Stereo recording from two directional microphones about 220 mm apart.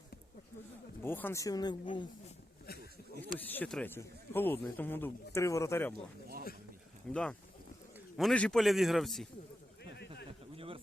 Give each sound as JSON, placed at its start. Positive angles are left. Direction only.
{"t": 1.0, "sound": "speech", "side_deg": 10}
{"t": 3.2, "sound": "speech", "side_deg": 10}
{"t": 7.1, "sound": "a man's voice", "side_deg": 5}
{"t": 9.8, "sound": "a sound", "side_deg": 50}